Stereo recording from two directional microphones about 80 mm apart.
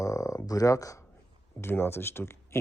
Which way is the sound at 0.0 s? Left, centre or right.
Left.